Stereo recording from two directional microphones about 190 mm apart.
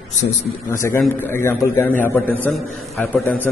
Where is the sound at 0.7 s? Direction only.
15° left (ahead or behind).